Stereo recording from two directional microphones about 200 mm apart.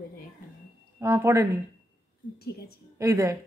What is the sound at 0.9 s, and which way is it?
Speech, 15° right (ahead or behind).